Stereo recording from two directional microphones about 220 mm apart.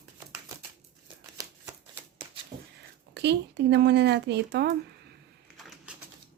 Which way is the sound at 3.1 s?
50° right (ahead or behind).